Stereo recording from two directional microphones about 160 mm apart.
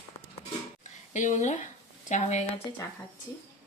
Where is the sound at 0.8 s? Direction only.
50° left (ahead or behind).